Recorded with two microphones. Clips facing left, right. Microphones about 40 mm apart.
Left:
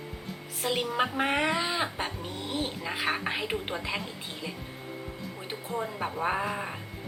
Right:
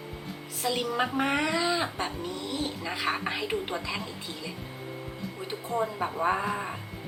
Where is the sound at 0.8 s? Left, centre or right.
Centre.